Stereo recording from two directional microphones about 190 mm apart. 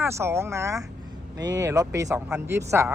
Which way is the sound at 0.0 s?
15° right (ahead or behind).